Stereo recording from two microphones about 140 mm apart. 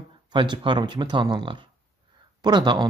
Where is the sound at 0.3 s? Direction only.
35° right (ahead or behind).